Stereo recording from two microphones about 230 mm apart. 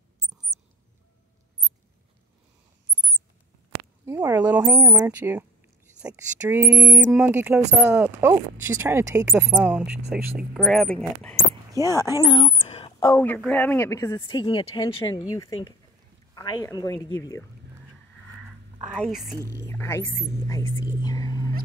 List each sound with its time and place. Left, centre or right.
4.0 s speech: centre
11.8 s speech: centre
13.2 s speech: centre
18.9 s speech: centre
19.3 s speech: centre
19.7 s speech: centre